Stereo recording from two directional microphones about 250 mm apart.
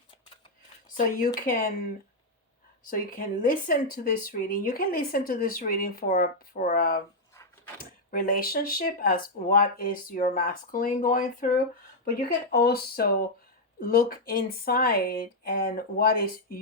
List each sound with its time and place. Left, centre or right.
0.9 s speech: left
2.9 s speech: left
8.1 s speech: left